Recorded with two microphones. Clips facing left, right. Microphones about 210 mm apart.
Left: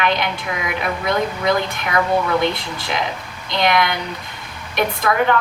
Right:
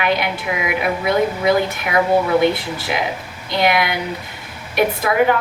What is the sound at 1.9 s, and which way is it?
Speech, 25° right (ahead or behind).